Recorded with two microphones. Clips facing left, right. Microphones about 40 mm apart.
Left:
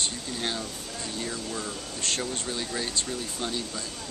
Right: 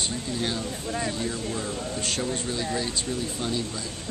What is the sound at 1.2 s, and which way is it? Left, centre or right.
Speech, centre.